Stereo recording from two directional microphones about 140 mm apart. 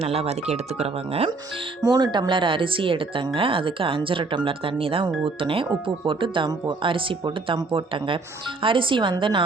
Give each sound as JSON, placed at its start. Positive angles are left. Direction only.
{"t": 0.0, "sound": "speech", "side_deg": -45}
{"t": 1.8, "sound": "speech", "side_deg": -25}